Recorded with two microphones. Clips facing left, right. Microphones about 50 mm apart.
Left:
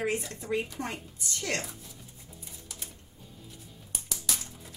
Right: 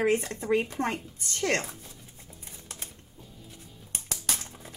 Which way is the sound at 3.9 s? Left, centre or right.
Right.